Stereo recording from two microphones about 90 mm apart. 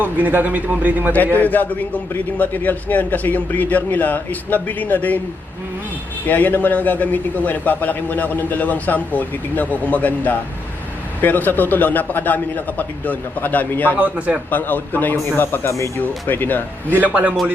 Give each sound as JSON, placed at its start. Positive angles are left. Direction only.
{"t": 0.0, "sound": "a man's voice", "side_deg": -20}
{"t": 1.1, "sound": "a man's voice", "side_deg": 20}
{"t": 6.2, "sound": "a man's voice", "side_deg": 20}
{"t": 14.0, "sound": "a man's voice", "side_deg": -15}
{"t": 14.5, "sound": "a man's voice", "side_deg": 20}